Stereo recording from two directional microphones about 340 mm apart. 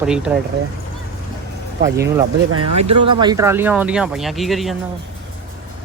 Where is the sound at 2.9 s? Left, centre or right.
Centre.